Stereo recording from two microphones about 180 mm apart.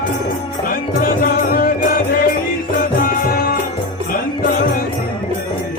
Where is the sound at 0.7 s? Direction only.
50° left (ahead or behind).